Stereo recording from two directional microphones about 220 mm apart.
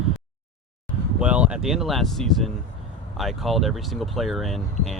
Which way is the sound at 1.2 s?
5° right (ahead or behind).